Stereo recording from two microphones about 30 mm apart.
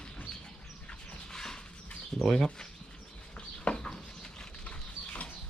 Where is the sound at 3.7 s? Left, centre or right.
Left.